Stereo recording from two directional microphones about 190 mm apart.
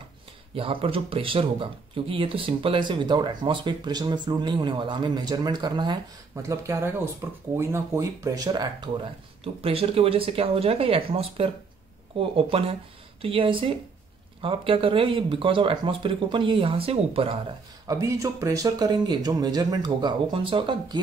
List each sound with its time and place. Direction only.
0.6 s speech: 30° right (ahead or behind)
17.8 s speech: 15° right (ahead or behind)